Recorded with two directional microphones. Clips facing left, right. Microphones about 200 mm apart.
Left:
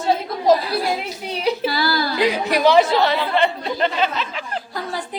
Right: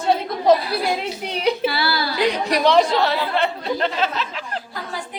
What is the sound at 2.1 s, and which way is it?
A woman's voice, centre (ahead or behind).